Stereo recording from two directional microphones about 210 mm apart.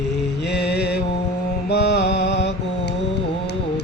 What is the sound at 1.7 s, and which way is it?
Mantra, 55° left (ahead or behind).